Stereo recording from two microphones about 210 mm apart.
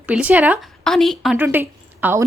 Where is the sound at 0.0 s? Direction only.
5° right (ahead or behind).